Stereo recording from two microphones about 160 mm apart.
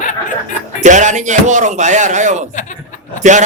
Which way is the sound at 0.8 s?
50° right (ahead or behind).